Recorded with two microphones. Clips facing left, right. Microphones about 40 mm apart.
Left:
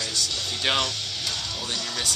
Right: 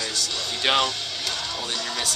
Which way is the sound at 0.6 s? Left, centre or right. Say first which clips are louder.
Right 3 dB; centre.